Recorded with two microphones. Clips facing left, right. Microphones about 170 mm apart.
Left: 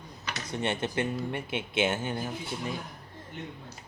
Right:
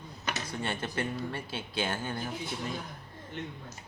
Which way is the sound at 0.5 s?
20° left (ahead or behind).